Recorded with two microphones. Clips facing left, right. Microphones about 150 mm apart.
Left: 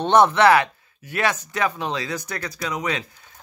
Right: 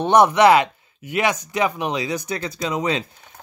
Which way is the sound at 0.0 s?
15° right (ahead or behind).